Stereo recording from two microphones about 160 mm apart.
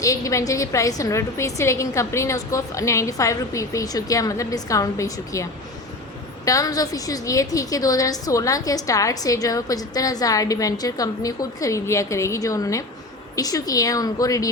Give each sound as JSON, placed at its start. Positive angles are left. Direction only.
{"t": 0.0, "sound": "a woman's voice", "side_deg": 20}